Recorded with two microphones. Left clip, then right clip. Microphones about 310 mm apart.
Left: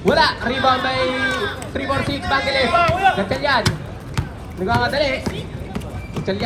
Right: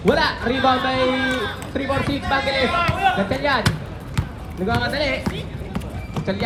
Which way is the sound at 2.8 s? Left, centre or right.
Centre.